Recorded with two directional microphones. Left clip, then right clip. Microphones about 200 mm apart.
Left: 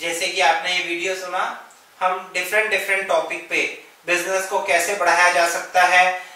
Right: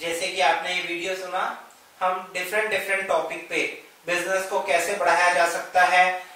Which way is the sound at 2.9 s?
15° right (ahead or behind).